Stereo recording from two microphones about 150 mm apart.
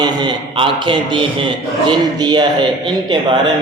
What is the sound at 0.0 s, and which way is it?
A man's voice, 30° right (ahead or behind).